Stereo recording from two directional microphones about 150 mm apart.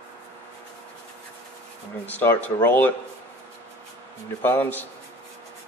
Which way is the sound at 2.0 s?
15° left (ahead or behind).